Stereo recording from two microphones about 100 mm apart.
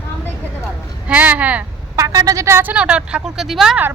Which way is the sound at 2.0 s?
35° right (ahead or behind).